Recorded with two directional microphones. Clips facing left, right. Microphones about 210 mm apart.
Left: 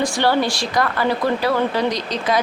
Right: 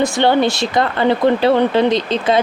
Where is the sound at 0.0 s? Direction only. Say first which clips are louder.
Right 4 dB; 20° right (ahead or behind).